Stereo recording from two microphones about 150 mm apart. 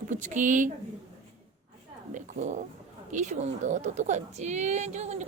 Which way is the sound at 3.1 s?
55° right (ahead or behind).